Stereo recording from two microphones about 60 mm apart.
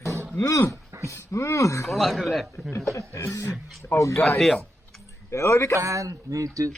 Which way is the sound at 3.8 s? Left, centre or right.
Left.